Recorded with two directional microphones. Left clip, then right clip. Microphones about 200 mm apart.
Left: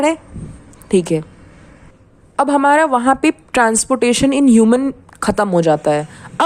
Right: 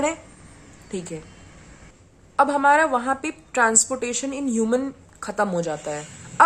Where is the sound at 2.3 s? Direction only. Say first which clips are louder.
Left 5 dB; 45° left (ahead or behind).